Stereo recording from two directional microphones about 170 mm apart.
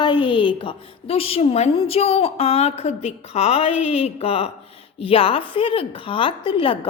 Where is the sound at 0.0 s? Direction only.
30° left (ahead or behind).